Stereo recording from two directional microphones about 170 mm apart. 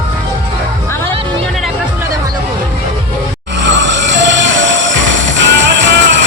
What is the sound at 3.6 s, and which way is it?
Music, 90° right.